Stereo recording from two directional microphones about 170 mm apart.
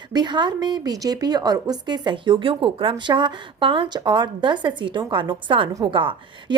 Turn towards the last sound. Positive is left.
turn(degrees=-30)  # may be behind; listen again after turning